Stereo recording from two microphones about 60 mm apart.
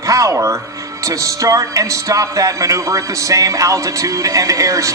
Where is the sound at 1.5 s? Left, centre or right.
Right.